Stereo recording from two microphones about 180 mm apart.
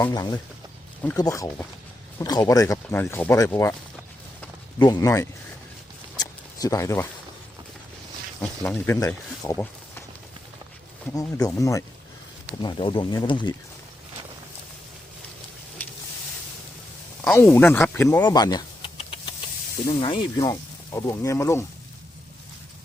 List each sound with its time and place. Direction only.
0.1 s speech: 20° left (ahead or behind)
4.8 s speech: 20° left (ahead or behind)
6.1 s a sound: 20° left (ahead or behind)
8.4 s speech: 10° left (ahead or behind)
11.2 s speech: 20° left (ahead or behind)
17.2 s speech: 10° left (ahead or behind)